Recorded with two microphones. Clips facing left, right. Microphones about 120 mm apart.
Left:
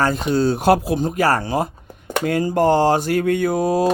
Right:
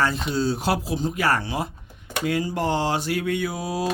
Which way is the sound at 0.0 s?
45° left (ahead or behind).